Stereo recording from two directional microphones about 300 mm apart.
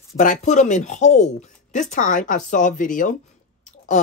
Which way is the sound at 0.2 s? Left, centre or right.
Left.